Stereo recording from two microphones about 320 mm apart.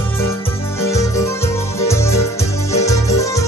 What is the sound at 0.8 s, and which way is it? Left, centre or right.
Music, centre.